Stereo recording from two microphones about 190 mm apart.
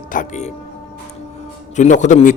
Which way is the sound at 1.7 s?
40° left (ahead or behind).